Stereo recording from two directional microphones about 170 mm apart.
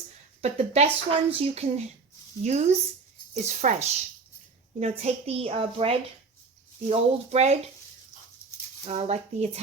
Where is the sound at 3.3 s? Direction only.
40° right (ahead or behind).